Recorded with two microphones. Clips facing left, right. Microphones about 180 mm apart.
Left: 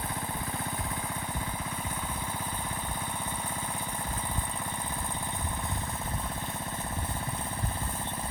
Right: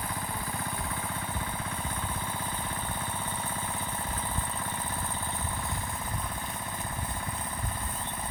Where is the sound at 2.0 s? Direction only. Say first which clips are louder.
Right 1 dB; 10° left (ahead or behind).